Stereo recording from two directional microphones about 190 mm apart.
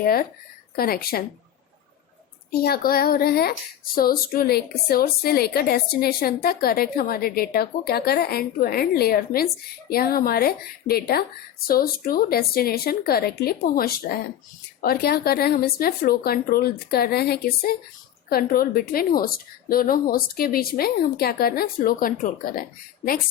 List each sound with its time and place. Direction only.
0.0 s a woman's voice: 50° left (ahead or behind)
2.5 s a woman's voice: 55° left (ahead or behind)